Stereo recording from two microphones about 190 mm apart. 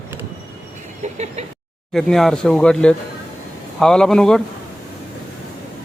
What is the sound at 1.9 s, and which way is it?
Speech, centre (ahead or behind).